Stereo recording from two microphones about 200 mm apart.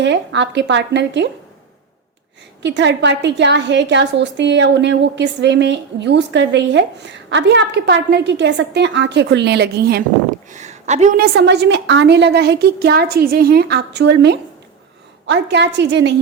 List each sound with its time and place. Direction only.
0.0 s a woman's voice: 60° right (ahead or behind)
2.6 s a woman's voice: 60° right (ahead or behind)
10.5 s speech: 35° right (ahead or behind)
11.2 s a woman's voice: 55° right (ahead or behind)